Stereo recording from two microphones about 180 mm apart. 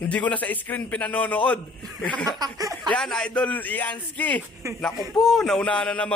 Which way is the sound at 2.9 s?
5° left (ahead or behind).